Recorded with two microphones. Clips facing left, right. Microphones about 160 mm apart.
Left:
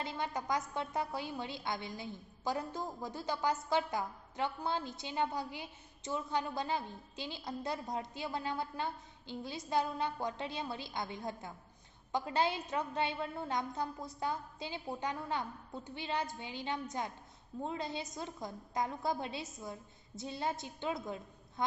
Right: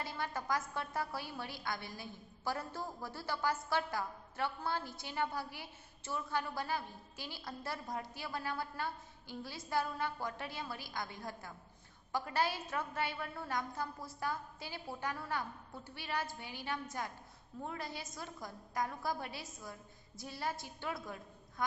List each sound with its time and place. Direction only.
0.0 s a woman's voice: 20° left (ahead or behind)